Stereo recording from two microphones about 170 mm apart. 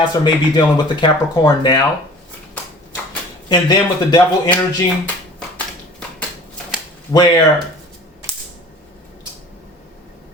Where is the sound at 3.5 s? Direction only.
25° left (ahead or behind).